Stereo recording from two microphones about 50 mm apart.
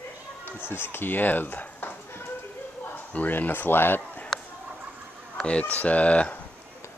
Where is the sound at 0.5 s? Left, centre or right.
Left.